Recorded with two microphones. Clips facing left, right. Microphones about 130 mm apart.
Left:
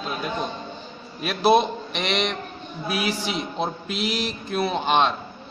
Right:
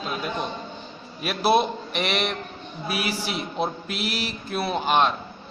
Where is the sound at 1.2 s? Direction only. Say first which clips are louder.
Left 2 dB; 5° right (ahead or behind).